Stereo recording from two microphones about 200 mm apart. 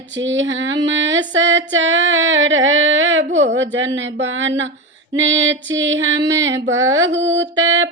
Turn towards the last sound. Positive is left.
turn(degrees=-75)  # may be behind; listen again after turning